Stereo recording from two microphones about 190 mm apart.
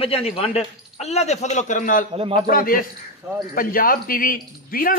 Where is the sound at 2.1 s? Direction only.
30° right (ahead or behind).